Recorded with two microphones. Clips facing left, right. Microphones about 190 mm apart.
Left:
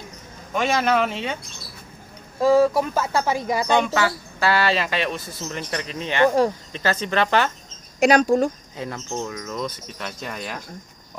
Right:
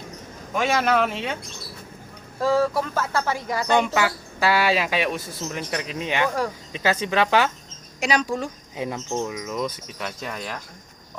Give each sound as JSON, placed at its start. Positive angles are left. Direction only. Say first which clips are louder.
{"t": 0.6, "sound": "speech", "louder": "left 1 dB", "side_deg": -5}
{"t": 2.4, "sound": "speech", "louder": "left 4 dB", "side_deg": 15}
{"t": 3.8, "sound": "speech", "louder": "left 1 dB", "side_deg": -10}
{"t": 8.0, "sound": "speech", "louder": "left 7 dB", "side_deg": 45}
{"t": 8.7, "sound": "speech", "louder": "right 2 dB", "side_deg": -15}